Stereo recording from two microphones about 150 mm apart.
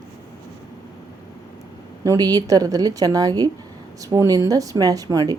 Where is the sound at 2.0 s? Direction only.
25° right (ahead or behind).